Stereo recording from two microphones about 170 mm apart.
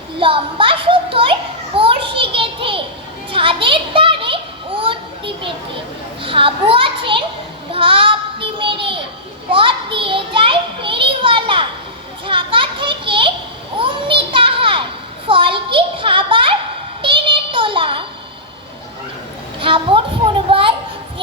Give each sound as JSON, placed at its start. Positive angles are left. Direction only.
{"t": 0.2, "sound": "children playing", "side_deg": -30}
{"t": 6.2, "sound": "a child's voice", "side_deg": -30}
{"t": 7.7, "sound": "child singing", "side_deg": -30}
{"t": 9.5, "sound": "children playing", "side_deg": -30}
{"t": 15.3, "sound": "a sound", "side_deg": -30}
{"t": 17.0, "sound": "child singing", "side_deg": -30}
{"t": 19.5, "sound": "a sound", "side_deg": -30}